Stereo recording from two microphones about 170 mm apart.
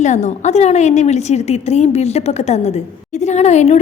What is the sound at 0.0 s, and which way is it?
A woman's voice, 45° left (ahead or behind).